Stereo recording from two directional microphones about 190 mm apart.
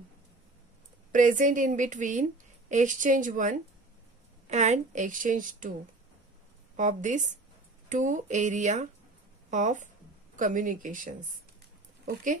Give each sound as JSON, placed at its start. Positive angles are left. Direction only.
{"t": 1.1, "sound": "a woman's voice", "side_deg": -40}
{"t": 6.8, "sound": "a woman's voice", "side_deg": -40}